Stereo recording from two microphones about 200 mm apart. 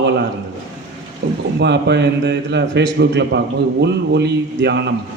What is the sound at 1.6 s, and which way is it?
A man's voice, 60° right (ahead or behind).